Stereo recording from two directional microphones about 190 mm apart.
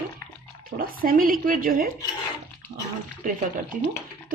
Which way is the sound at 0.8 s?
50° right (ahead or behind).